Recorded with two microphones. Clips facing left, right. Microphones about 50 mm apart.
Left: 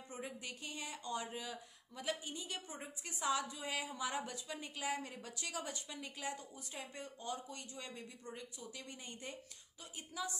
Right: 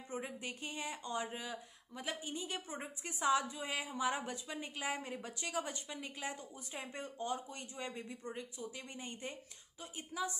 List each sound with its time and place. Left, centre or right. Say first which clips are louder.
0.1 s a woman's voice: right 4 dB; right